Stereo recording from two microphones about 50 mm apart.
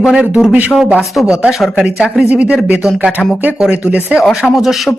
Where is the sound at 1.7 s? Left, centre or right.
Centre.